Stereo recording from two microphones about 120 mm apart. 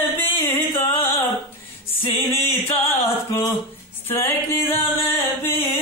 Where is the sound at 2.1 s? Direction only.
20° left (ahead or behind).